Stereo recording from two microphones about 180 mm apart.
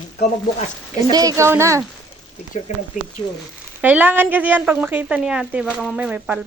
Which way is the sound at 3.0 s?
45° left (ahead or behind).